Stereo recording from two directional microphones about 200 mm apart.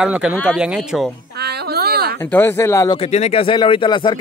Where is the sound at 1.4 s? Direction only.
55° right (ahead or behind).